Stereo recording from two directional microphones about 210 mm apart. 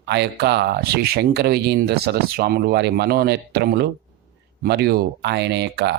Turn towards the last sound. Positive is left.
turn(degrees=-55)  # may be behind; listen again after turning